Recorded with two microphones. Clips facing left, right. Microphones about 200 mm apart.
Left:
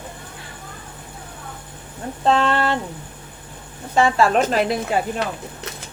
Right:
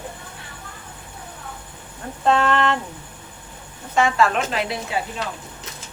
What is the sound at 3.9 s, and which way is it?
Speech, 35° left (ahead or behind).